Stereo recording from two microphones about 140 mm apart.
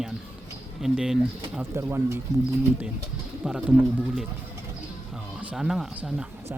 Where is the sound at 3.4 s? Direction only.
5° right (ahead or behind).